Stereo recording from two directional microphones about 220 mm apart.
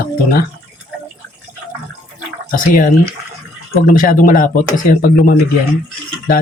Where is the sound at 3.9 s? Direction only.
40° left (ahead or behind).